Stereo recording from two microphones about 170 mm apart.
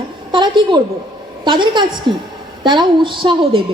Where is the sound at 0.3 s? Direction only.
25° right (ahead or behind).